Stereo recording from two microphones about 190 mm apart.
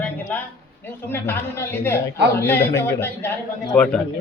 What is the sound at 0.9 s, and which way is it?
A woman's voice, 10° left (ahead or behind).